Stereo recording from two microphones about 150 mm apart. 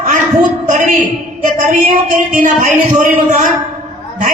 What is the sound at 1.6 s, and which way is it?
Music, 60° right (ahead or behind).